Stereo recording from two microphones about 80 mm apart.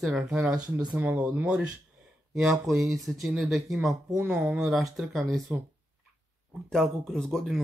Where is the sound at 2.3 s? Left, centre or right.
Centre.